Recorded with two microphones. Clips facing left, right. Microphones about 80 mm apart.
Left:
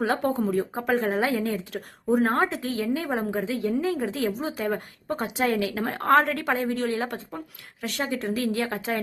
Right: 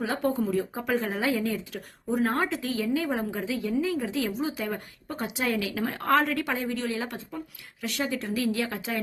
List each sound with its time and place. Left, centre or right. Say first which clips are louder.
0.4 s a woman's voice: left 3 dB; left